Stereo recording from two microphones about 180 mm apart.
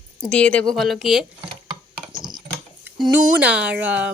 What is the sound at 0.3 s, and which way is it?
Speech, 5° left (ahead or behind).